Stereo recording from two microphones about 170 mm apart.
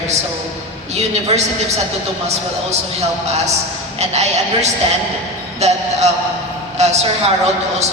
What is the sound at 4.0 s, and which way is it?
A woman's voice, 40° right (ahead or behind).